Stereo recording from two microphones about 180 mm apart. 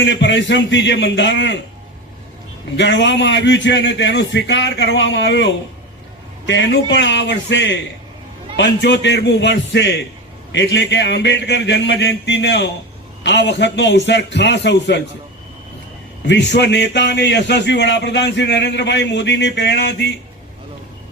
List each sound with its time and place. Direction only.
0.0 s a man's voice: 85° left
2.7 s a man's voice: 85° left
16.2 s a man's voice: 75° left (ahead or behind)